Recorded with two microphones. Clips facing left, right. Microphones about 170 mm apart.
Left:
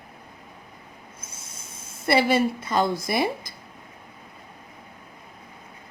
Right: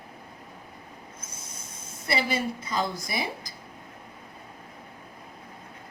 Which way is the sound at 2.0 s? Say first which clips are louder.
Left 8 dB; 65° left (ahead or behind).